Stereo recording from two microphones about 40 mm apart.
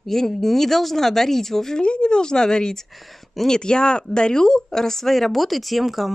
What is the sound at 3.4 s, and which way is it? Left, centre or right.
Speech, centre.